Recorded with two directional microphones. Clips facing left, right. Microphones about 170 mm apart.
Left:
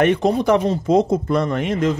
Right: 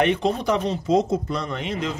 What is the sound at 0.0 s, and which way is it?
Speech, 50° left (ahead or behind).